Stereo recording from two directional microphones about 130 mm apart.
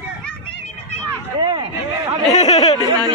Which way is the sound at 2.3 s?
55° left (ahead or behind).